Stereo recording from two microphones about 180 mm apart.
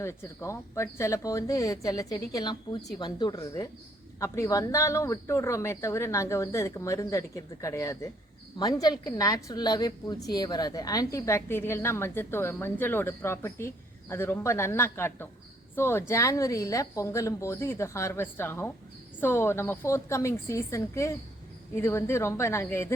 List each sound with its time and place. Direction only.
0.0 s a woman's voice: 15° left (ahead or behind)